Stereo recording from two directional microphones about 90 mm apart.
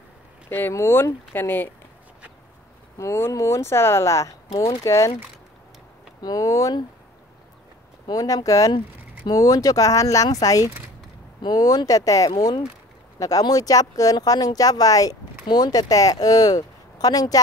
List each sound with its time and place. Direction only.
0.5 s speech: 25° left (ahead or behind)
3.0 s speech: 30° left (ahead or behind)
6.2 s speech: 40° left (ahead or behind)
8.1 s speech: 40° left (ahead or behind)